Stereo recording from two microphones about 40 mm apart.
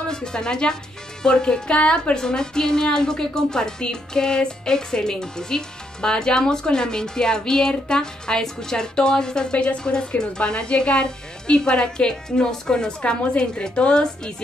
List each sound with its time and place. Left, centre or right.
0.1 s a woman's voice: centre
2.1 s a woman's voice: centre